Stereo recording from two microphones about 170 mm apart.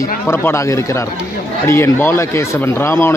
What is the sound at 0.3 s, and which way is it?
Speech, 15° left (ahead or behind).